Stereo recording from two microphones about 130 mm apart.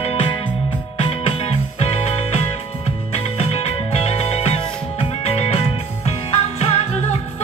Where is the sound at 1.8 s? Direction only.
50° left (ahead or behind).